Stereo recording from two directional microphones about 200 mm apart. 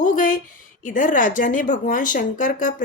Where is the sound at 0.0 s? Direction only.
40° left (ahead or behind).